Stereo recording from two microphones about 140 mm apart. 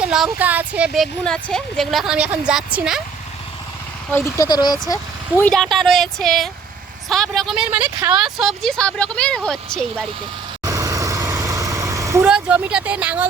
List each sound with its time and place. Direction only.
0.0 s a woman's voice: 5° right (ahead or behind)
4.1 s speech: 20° left (ahead or behind)
4.4 s speech: 30° left (ahead or behind)
5.4 s a woman's voice: 5° left (ahead or behind)
10.6 s vehicle: 25° right (ahead or behind)
12.2 s speech: 10° right (ahead or behind)